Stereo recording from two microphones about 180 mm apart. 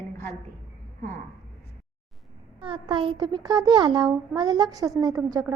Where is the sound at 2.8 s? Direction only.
25° right (ahead or behind).